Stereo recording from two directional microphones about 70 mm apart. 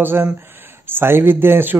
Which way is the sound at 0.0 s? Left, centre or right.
Right.